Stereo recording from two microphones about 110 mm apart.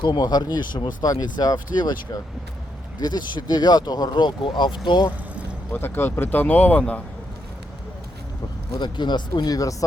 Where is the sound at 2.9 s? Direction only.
40° left (ahead or behind).